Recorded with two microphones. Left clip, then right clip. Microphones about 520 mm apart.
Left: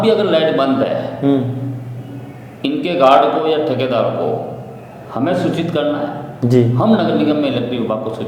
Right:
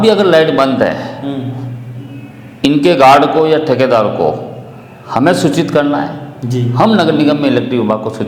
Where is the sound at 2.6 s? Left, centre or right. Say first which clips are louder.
Right 6 dB; right.